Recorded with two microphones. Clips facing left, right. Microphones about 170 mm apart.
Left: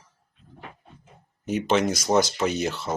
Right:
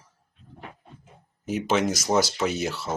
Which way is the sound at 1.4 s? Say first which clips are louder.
Left 1 dB; 5° right (ahead or behind).